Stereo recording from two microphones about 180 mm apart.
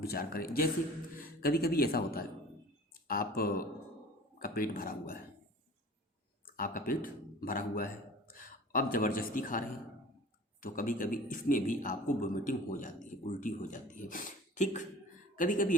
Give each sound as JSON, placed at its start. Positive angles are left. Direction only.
{"t": 0.0, "sound": "a man's voice", "side_deg": 55}
{"t": 6.6, "sound": "a man's voice", "side_deg": 50}